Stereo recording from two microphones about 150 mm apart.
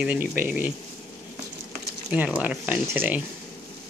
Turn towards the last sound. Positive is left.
turn(degrees=-10)  # may be behind; listen again after turning